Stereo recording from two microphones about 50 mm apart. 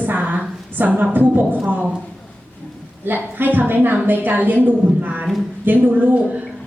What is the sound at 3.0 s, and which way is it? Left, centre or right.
A woman's voice, right.